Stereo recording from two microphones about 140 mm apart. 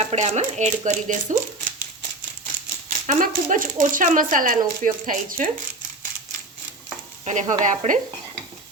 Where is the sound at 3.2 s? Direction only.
75° right (ahead or behind).